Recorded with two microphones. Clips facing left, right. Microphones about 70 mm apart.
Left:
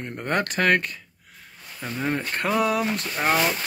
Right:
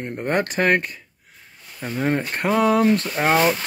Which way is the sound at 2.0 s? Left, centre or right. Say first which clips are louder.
Right 4 dB; right.